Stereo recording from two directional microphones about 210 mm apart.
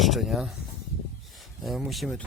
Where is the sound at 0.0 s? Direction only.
Centre (ahead or behind).